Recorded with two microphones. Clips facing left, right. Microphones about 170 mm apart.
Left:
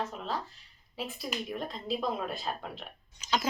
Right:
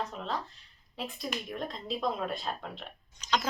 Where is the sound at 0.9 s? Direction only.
5° left (ahead or behind).